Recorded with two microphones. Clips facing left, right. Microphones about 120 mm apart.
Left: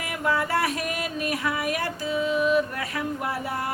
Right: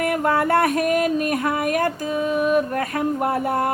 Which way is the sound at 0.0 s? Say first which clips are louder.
Right 7 dB; 55° right (ahead or behind).